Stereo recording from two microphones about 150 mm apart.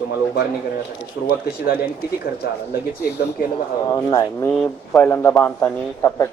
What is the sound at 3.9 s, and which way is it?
Speech, 25° left (ahead or behind).